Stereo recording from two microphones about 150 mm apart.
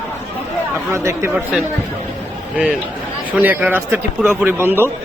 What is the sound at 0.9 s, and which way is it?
Speech, 20° right (ahead or behind).